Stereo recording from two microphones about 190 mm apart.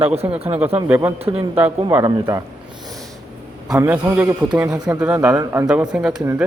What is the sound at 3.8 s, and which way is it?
A man's voice, 10° right (ahead or behind).